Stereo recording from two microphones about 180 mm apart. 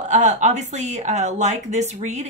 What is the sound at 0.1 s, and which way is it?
Speech, 40° right (ahead or behind).